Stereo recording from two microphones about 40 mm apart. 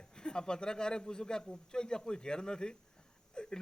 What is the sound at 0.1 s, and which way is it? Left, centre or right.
A man's voice, centre.